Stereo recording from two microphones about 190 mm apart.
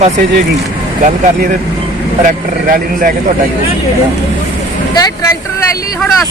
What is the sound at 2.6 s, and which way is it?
Speech, 50° right (ahead or behind).